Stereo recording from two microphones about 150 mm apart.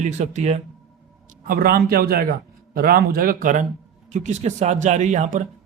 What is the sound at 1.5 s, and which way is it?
Speech, 85° right.